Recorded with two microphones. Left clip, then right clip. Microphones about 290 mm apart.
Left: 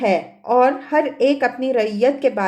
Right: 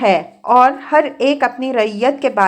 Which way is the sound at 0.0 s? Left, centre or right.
Centre.